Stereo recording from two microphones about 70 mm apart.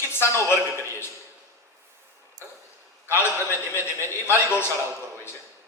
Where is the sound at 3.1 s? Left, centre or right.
Left.